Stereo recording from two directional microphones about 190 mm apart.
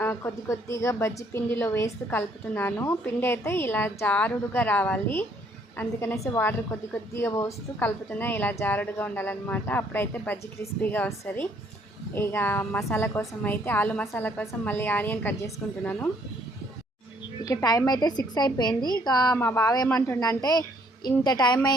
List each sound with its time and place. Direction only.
0.0 s a woman's voice: 15° left (ahead or behind)
17.4 s a woman's voice: 20° left (ahead or behind)